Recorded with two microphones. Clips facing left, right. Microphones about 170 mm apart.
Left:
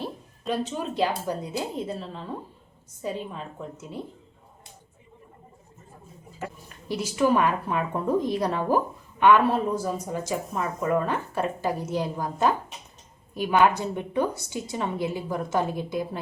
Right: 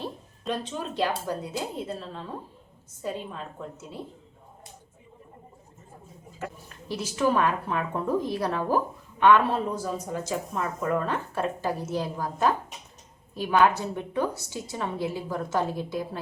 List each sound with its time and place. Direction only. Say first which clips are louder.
0.0 s a woman's voice: left 1 dB; 10° left (ahead or behind)
6.8 s speech: left 2 dB; 10° left (ahead or behind)